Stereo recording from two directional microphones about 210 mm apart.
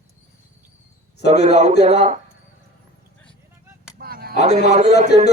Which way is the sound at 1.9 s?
30° right (ahead or behind).